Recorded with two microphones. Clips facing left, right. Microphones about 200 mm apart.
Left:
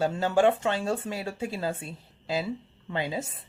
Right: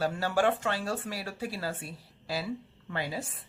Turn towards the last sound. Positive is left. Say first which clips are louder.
# left 4 dB
turn(degrees=20)  # may be behind; listen again after turning